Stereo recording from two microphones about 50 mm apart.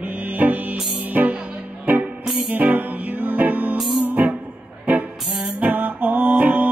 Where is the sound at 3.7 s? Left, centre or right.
Centre.